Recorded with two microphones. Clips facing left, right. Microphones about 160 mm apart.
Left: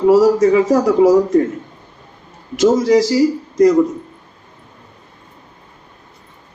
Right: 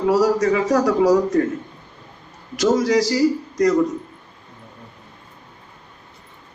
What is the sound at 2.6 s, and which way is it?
Speech, 25° left (ahead or behind).